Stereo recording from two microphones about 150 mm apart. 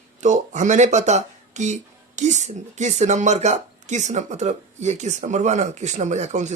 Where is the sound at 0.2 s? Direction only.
55° right (ahead or behind).